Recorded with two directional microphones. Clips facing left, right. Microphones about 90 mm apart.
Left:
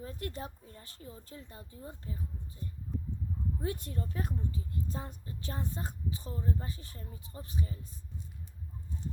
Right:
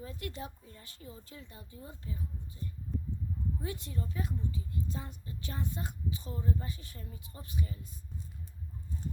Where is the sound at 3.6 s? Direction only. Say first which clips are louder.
Left 2 dB; 45° left (ahead or behind).